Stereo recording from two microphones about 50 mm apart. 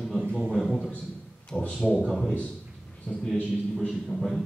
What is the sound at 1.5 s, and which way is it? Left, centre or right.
Speech, centre.